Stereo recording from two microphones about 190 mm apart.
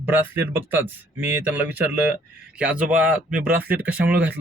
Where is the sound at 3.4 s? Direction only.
50° right (ahead or behind).